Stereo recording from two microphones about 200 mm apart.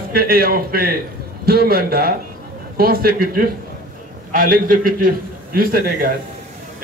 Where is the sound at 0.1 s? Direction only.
50° right (ahead or behind).